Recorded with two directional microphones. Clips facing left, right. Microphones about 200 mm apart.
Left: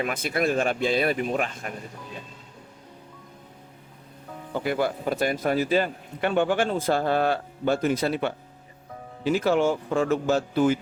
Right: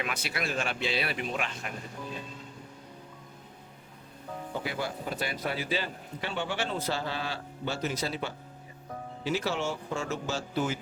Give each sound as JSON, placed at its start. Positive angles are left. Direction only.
{"t": 0.0, "sound": "speech", "side_deg": 50}
{"t": 4.6, "sound": "speech", "side_deg": 55}